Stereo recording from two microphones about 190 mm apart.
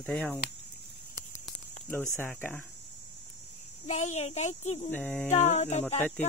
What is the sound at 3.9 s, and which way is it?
A child's voice, 35° left (ahead or behind).